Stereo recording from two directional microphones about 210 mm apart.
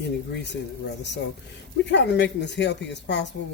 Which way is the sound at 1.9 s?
55° left (ahead or behind).